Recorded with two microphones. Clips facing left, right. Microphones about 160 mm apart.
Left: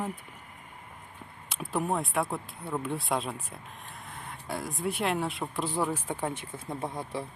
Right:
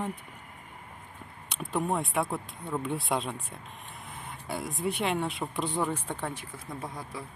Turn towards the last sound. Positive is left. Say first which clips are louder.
# left 4 dB
turn(degrees=25)  # may be behind; listen again after turning